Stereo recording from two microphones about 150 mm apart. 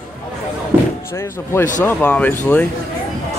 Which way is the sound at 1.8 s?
10° left (ahead or behind).